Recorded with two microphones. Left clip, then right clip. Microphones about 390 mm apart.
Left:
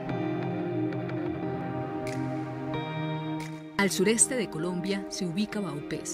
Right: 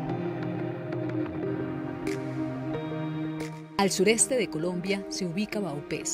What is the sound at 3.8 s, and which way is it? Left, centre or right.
Speech, centre.